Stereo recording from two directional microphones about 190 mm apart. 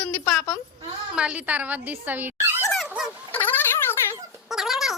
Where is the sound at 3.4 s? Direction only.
10° left (ahead or behind).